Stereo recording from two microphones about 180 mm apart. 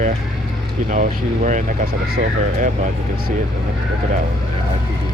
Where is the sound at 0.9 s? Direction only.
45° right (ahead or behind).